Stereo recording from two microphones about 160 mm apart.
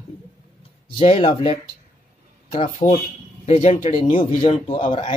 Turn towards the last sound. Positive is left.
turn(degrees=35)  # may be behind; listen again after turning